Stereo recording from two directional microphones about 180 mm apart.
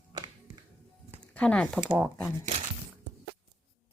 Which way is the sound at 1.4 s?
5° left (ahead or behind).